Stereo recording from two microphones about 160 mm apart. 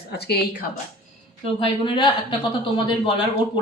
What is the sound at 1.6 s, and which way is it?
Speech, 30° left (ahead or behind).